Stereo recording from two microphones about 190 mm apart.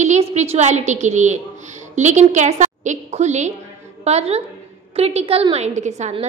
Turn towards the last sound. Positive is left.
turn(degrees=-35)  # may be behind; listen again after turning